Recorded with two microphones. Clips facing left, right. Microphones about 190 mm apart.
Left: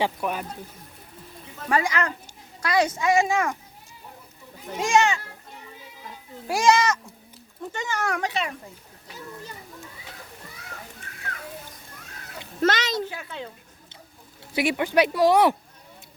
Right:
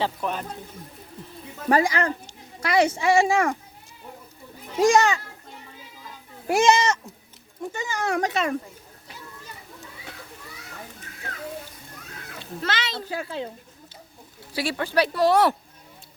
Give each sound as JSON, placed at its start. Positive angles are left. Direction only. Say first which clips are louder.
{"t": 0.0, "sound": "speech", "louder": "left 1 dB", "side_deg": 10}
{"t": 1.7, "sound": "speech", "louder": "right 3 dB", "side_deg": -35}
{"t": 4.8, "sound": "speech", "louder": "right 3 dB", "side_deg": -35}
{"t": 6.5, "sound": "speech", "louder": "right 1 dB", "side_deg": -25}
{"t": 7.6, "sound": "speech", "louder": "even", "side_deg": -10}
{"t": 8.2, "sound": "speech", "louder": "right 4 dB", "side_deg": -45}
{"t": 12.6, "sound": "a child's voice", "louder": "left 7 dB", "side_deg": 45}
{"t": 13.1, "sound": "speech", "louder": "right 5 dB", "side_deg": -30}
{"t": 14.5, "sound": "speech", "louder": "left 3 dB", "side_deg": 20}